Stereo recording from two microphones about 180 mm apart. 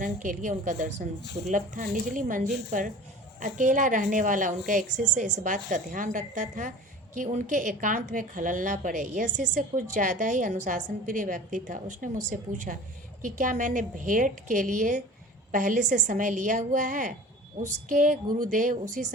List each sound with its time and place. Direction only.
0.0 s a woman's voice: 45° right (ahead or behind)